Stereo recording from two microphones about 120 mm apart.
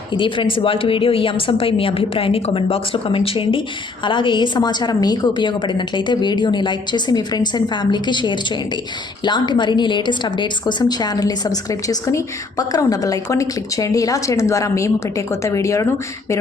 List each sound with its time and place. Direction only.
0.1 s a woman's voice: 45° left (ahead or behind); by 15.9 s 25° left (ahead or behind)